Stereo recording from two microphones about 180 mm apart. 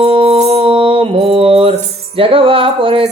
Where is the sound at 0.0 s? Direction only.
30° right (ahead or behind).